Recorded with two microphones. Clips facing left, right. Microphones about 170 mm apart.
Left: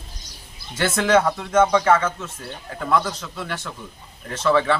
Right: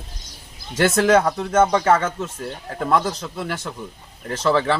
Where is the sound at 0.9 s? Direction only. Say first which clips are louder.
Right 1 dB; 30° right (ahead or behind).